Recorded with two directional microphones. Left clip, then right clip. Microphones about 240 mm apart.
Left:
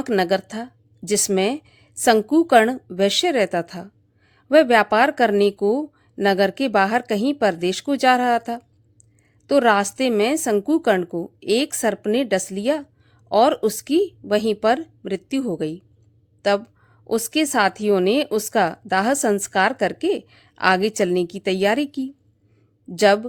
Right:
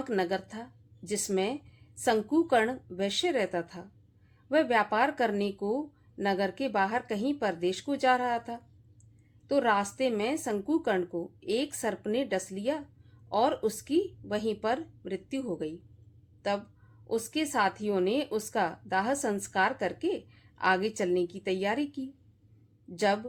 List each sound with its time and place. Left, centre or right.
0.0 s speech: left
17.1 s speech: left